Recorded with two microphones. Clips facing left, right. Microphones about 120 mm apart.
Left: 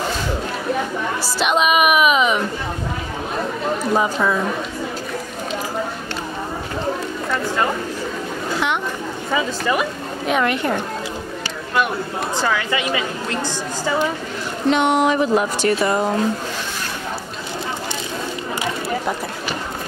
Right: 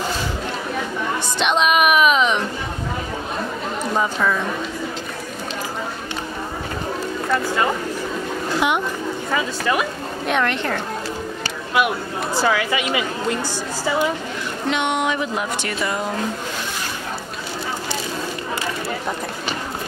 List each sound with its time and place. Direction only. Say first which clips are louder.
1.2 s a woman's voice: left 1 dB; 5° left (ahead or behind)
3.9 s speech: left 1 dB; 10° left (ahead or behind)
9.3 s a woman's voice: left 2 dB; centre (ahead or behind)
12.4 s a woman's voice: right 2 dB; 10° right (ahead or behind)
14.7 s speech: left 5 dB; 35° left (ahead or behind)